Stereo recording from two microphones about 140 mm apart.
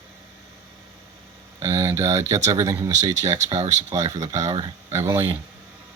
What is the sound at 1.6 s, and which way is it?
Speech, 20° right (ahead or behind).